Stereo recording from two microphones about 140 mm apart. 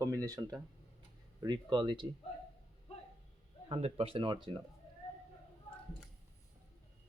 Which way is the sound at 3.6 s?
40° right (ahead or behind).